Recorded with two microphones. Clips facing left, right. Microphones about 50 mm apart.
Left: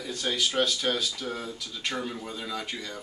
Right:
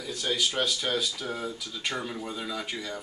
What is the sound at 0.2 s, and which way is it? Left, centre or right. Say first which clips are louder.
Speech: left 1 dB; centre.